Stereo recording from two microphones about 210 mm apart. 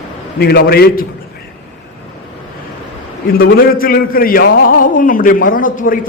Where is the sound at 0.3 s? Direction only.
50° left (ahead or behind).